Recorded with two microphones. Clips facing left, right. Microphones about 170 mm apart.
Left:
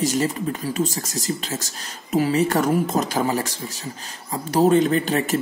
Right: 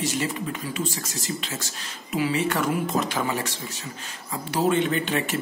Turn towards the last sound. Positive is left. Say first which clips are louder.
# left 4 dB
turn(degrees=40)  # may be behind; listen again after turning